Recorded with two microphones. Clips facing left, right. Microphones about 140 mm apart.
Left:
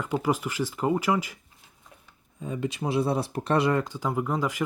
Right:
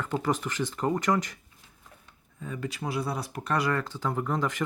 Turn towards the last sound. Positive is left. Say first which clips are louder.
# left 2 dB
turn(degrees=10)  # may be behind; listen again after turning